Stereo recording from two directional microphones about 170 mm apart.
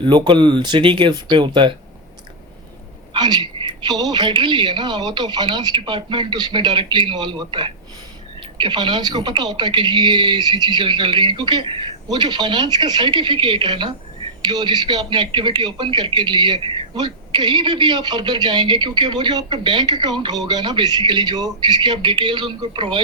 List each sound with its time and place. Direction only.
0.0 s speech: 25° right (ahead or behind)
3.1 s speech: 25° right (ahead or behind)